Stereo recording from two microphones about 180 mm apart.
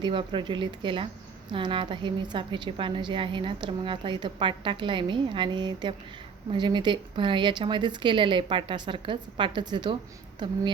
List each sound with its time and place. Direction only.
0.0 s a woman's voice: 25° right (ahead or behind)